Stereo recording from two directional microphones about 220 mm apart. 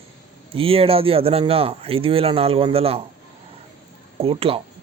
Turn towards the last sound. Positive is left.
turn(degrees=-25)  # may be behind; listen again after turning